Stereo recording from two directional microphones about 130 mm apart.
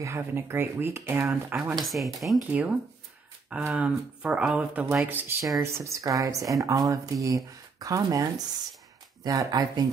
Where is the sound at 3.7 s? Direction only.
10° right (ahead or behind).